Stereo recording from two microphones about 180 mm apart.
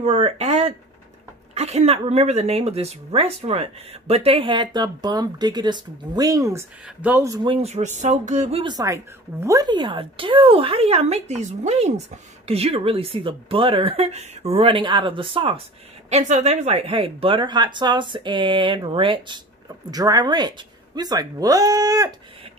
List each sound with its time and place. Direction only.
0.0 s speech: 35° right (ahead or behind); by 7.5 s 20° right (ahead or behind)
7.6 s speech: 40° right (ahead or behind)
8.7 s a woman's voice: 15° right (ahead or behind)